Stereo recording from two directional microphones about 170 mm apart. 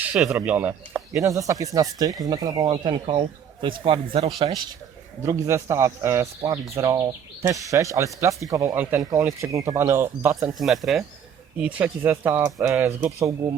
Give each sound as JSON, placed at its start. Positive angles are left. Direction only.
{"t": 0.0, "sound": "a man's voice", "side_deg": -5}
{"t": 5.2, "sound": "speech", "side_deg": -15}
{"t": 10.6, "sound": "speech", "side_deg": 0}